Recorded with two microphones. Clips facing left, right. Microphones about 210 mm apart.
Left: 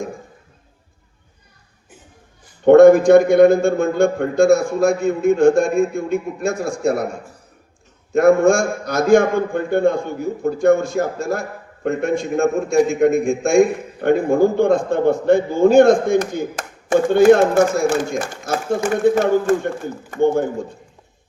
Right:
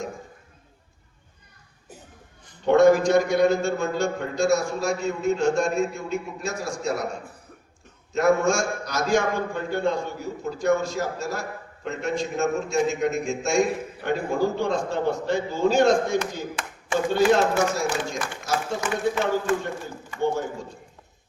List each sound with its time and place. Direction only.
2.6 s a man's voice: 55° left (ahead or behind)